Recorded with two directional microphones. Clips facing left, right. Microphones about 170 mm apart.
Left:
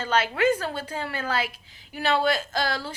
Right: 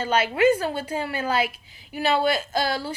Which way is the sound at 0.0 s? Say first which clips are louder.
Right 3 dB; 10° right (ahead or behind).